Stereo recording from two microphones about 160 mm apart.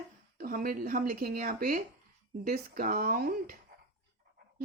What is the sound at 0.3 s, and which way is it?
Speech, 70° right (ahead or behind).